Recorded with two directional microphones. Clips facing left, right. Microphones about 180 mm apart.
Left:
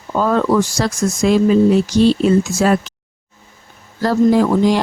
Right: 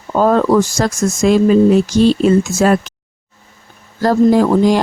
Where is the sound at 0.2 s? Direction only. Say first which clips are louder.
Right 3 dB; 45° right (ahead or behind).